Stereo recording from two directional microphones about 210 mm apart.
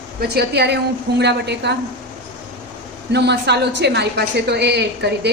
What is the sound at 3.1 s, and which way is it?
A woman's voice, 55° right (ahead or behind).